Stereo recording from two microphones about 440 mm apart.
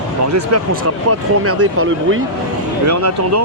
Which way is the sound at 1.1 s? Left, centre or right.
Right.